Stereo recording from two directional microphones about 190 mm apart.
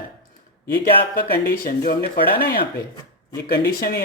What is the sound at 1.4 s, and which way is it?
Speech, 50° left (ahead or behind).